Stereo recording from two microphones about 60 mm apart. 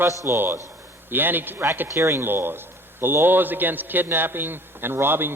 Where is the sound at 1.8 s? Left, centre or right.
Right.